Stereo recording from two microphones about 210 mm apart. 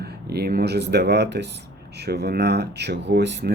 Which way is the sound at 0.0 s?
50° right (ahead or behind).